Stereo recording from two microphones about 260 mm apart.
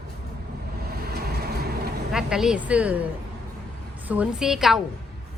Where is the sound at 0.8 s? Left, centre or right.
Right.